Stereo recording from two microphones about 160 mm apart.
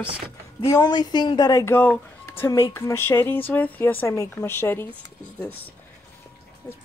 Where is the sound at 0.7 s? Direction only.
25° left (ahead or behind).